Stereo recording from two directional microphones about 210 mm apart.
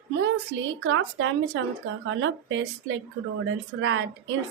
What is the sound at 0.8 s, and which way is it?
A woman's voice, 65° right (ahead or behind).